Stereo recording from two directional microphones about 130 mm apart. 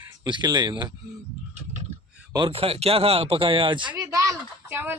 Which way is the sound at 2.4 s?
50° right (ahead or behind).